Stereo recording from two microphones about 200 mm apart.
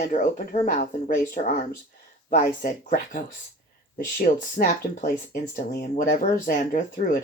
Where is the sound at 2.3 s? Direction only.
40° left (ahead or behind).